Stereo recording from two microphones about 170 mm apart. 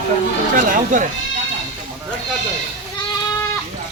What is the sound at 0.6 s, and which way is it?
Speech, 50° right (ahead or behind).